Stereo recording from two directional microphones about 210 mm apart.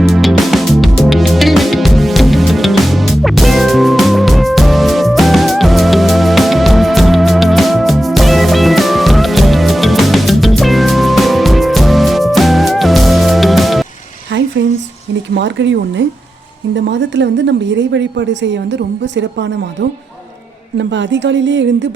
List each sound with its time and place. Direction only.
0.1 s music: centre (ahead or behind)
14.3 s a sound: 60° right (ahead or behind)
15.4 s a woman's voice: 55° right (ahead or behind)